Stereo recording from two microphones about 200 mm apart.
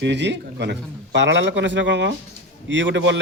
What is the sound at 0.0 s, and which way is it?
Speech, 60° right (ahead or behind).